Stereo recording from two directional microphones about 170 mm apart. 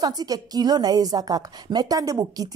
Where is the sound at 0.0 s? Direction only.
20° right (ahead or behind).